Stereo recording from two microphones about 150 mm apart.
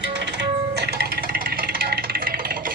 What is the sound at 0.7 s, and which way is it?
Music, 90° right.